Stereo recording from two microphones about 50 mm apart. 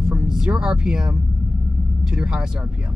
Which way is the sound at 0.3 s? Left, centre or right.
Centre.